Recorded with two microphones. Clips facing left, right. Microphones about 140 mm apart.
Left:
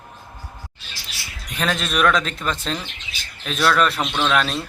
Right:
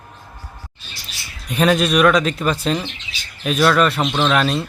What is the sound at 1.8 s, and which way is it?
Speech, 5° right (ahead or behind).